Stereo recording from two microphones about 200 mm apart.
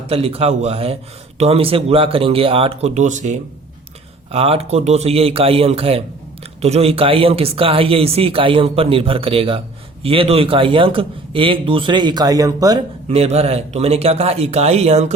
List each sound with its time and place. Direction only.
0.1 s speech: 30° right (ahead or behind)
13.1 s speech: 30° right (ahead or behind)